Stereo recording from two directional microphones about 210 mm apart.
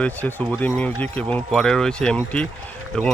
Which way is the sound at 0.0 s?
10° left (ahead or behind).